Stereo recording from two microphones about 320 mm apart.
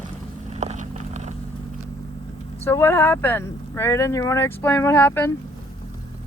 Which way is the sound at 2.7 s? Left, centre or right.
Centre.